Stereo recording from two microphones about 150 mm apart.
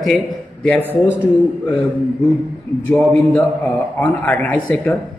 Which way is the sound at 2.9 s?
10° left (ahead or behind).